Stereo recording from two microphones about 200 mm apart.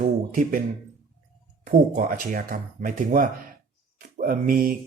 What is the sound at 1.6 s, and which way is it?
Speech, 40° right (ahead or behind).